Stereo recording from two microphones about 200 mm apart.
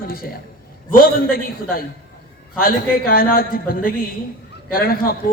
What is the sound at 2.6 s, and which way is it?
A man's voice, 45° left (ahead or behind).